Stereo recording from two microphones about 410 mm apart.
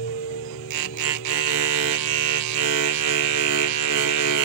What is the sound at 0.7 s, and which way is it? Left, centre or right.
Music, left.